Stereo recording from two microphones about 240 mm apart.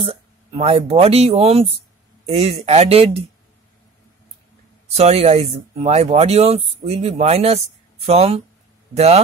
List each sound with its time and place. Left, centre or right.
0.0 s speech: right
4.9 s speech: right